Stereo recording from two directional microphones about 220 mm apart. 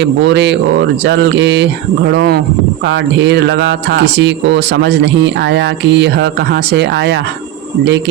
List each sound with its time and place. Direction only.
0.0 s speech: 55° right (ahead or behind)